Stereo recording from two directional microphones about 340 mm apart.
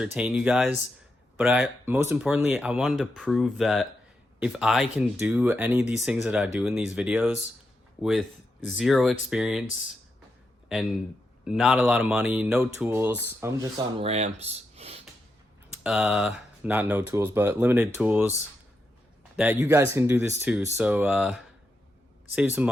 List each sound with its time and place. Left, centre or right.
0.0 s speech: centre
8.8 s speech: centre
11.4 s speech: centre
15.8 s speech: centre
19.4 s speech: centre